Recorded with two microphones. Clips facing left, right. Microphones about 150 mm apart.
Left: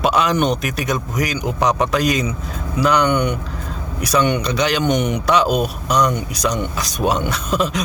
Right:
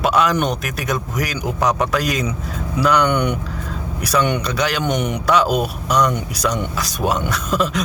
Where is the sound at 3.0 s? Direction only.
10° left (ahead or behind).